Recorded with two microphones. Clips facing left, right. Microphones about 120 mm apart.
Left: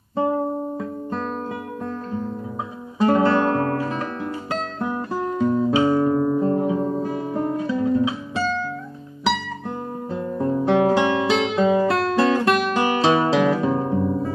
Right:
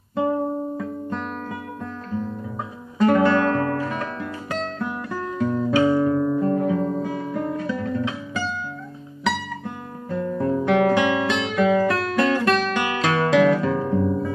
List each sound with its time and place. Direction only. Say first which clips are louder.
3.0 s music: even; 30° left (ahead or behind)
5.4 s music: left 3 dB; 15° left (ahead or behind)
5.8 s guitar: right 2 dB; 30° left (ahead or behind)
10.1 s guitar: right 1 dB; 20° left (ahead or behind)
13.1 s guitar: right 1 dB; 20° left (ahead or behind)